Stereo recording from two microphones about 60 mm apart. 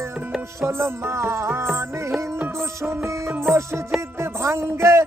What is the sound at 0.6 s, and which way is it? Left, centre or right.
Music, right.